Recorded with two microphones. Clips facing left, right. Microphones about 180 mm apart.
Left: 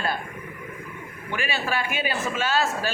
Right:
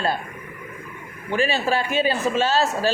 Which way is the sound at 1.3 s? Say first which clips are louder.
Right 7 dB; 35° right (ahead or behind).